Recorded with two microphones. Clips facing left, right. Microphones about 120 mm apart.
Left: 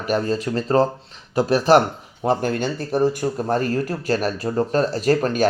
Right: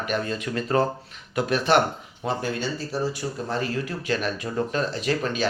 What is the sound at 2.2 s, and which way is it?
Speech, 50° left (ahead or behind).